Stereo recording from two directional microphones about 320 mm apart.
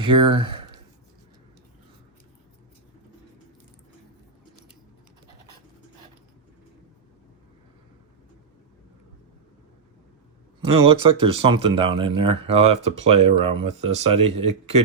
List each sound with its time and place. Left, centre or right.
0.0 s speech: centre
10.6 s speech: centre